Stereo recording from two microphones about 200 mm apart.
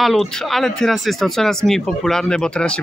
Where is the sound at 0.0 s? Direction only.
Centre (ahead or behind).